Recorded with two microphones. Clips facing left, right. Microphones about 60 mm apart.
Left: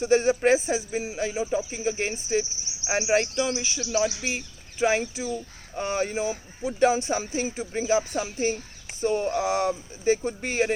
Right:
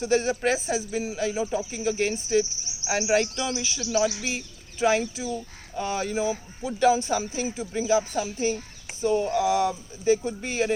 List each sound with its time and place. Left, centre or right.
0.0 s speech: left
1.3 s speech: centre; by 10.7 s left